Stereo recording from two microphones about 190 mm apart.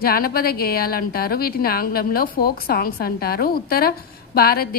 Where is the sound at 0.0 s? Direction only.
50° left (ahead or behind).